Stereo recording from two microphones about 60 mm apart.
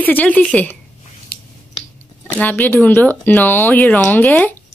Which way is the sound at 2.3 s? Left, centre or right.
Left.